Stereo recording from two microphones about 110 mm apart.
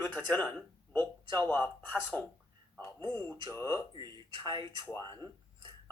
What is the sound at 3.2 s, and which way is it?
Speech, 25° left (ahead or behind).